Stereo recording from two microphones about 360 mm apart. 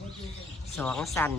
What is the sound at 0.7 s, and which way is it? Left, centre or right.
Speech, centre.